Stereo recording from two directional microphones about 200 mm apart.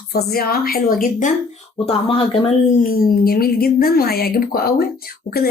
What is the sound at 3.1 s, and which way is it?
Speech, 50° left (ahead or behind).